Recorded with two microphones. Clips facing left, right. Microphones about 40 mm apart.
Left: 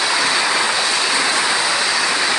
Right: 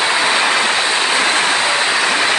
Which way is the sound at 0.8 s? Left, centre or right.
Right.